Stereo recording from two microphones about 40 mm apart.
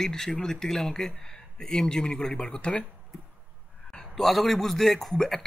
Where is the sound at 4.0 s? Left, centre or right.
Centre.